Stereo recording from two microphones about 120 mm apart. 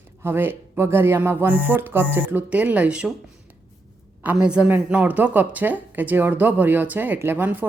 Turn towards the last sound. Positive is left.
turn(degrees=-15)  # may be behind; listen again after turning